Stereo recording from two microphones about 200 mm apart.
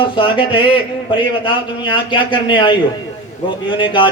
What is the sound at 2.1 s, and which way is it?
A man's voice, 25° left (ahead or behind).